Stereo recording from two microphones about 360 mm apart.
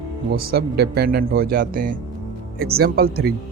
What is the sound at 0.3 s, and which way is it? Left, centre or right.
A man's voice, right.